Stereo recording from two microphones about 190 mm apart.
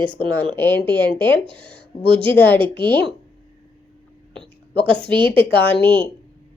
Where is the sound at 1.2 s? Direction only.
25° right (ahead or behind).